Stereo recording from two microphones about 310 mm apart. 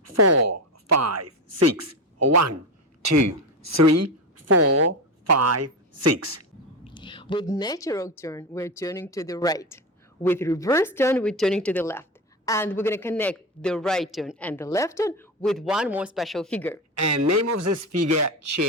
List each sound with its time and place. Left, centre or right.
0.0 s a woman's voice: right
6.9 s a man's voice: centre
16.9 s speech: right